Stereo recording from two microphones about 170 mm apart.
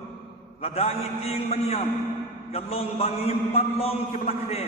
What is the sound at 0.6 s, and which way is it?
A man's voice, 35° left (ahead or behind).